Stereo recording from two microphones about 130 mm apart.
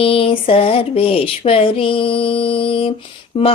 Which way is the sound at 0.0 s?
45° left (ahead or behind).